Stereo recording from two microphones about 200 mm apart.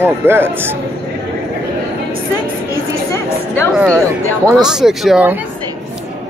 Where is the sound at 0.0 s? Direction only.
10° right (ahead or behind).